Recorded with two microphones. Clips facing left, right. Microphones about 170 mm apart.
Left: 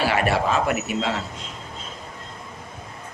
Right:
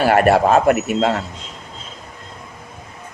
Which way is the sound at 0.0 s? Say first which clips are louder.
Right 8 dB; 50° right (ahead or behind).